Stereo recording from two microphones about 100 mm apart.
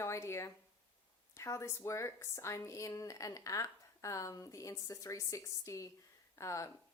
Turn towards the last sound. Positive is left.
turn(degrees=30)  # may be behind; listen again after turning